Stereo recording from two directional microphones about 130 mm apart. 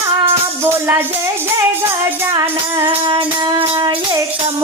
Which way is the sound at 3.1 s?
35° right (ahead or behind).